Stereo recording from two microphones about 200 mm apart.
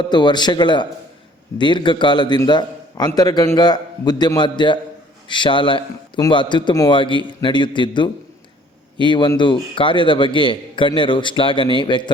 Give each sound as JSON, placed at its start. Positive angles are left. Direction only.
{"t": 0.0, "sound": "a man's voice", "side_deg": 20}